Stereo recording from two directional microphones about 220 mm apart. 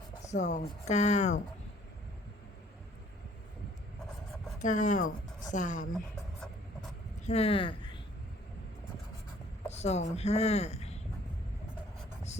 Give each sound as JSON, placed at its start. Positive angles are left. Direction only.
{"t": 0.3, "sound": "speech", "side_deg": 35}
{"t": 4.6, "sound": "speech", "side_deg": 35}
{"t": 7.3, "sound": "speech", "side_deg": 25}
{"t": 9.6, "sound": "speech", "side_deg": 30}